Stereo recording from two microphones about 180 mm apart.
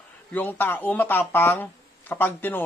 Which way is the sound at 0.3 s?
10° left (ahead or behind).